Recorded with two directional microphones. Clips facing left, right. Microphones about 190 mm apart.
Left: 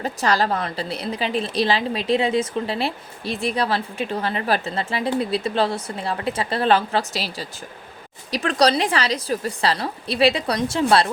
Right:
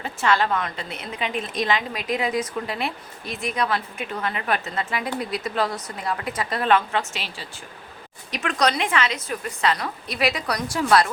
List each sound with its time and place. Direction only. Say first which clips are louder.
0.0 s a woman's voice: left 1 dB; 40° left (ahead or behind)